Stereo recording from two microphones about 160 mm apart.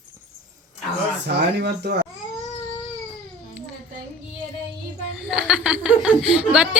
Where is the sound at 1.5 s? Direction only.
90° right.